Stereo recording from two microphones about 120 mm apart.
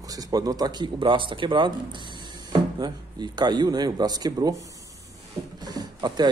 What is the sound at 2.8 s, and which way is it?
Speech, 35° right (ahead or behind).